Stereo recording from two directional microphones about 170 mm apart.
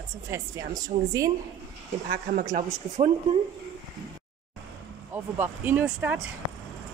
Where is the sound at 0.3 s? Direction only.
20° right (ahead or behind).